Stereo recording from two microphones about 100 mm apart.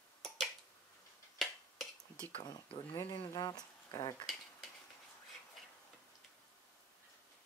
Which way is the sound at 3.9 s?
40° left (ahead or behind).